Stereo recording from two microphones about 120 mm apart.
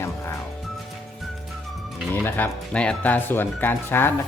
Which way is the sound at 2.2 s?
15° left (ahead or behind).